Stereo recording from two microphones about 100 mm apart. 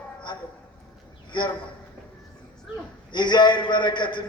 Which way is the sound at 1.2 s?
50° left (ahead or behind).